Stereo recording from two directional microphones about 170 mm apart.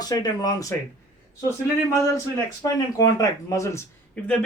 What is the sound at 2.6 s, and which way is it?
Speech, 20° left (ahead or behind).